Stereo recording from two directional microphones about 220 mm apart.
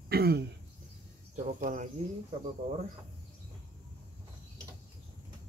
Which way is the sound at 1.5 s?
35° right (ahead or behind).